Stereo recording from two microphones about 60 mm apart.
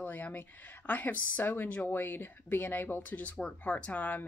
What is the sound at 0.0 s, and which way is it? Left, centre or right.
Speech, left.